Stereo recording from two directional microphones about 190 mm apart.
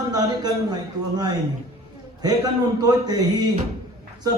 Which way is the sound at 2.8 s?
20° right (ahead or behind).